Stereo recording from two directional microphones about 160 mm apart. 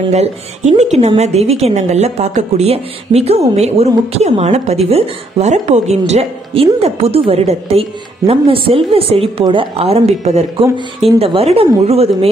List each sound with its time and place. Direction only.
0.1 s a woman's voice: 45° right (ahead or behind)